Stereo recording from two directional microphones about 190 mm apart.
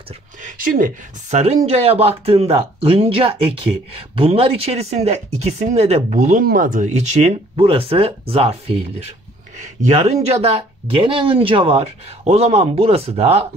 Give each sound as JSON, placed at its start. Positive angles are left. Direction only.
{"t": 0.4, "sound": "speech", "side_deg": -45}